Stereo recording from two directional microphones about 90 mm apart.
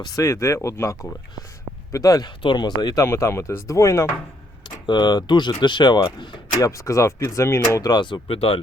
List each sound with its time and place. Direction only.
0.0 s speech: 45° left (ahead or behind)
0.3 s speech: 30° left (ahead or behind)
2.4 s speech: 55° left (ahead or behind)
3.0 s speech: 30° left (ahead or behind)
4.6 s speech: 55° left (ahead or behind)
6.6 s speech: 35° left (ahead or behind)
7.8 s speech: 50° left (ahead or behind); by 8.5 s 90° left